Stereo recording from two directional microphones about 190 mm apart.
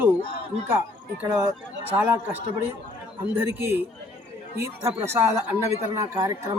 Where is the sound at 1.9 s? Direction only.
10° right (ahead or behind).